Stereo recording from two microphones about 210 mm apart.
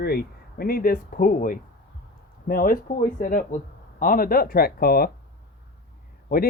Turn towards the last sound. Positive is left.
turn(degrees=45)  # may be behind; listen again after turning